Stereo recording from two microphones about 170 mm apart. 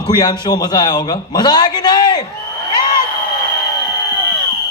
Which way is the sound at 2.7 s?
25° left (ahead or behind).